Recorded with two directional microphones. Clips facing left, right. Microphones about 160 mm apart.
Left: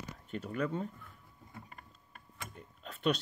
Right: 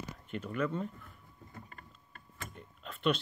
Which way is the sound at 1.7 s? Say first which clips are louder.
Even; 10° left (ahead or behind).